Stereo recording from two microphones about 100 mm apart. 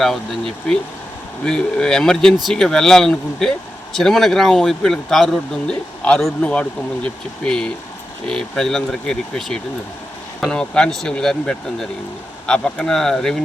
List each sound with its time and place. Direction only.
0.0 s speech: 5° left (ahead or behind)